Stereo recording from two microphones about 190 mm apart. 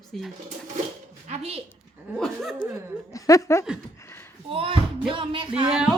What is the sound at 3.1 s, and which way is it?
Speech, 15° left (ahead or behind).